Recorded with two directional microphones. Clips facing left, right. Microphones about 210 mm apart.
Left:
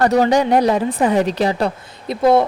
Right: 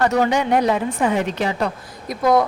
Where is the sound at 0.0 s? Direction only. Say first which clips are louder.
Left 4 dB; 35° left (ahead or behind).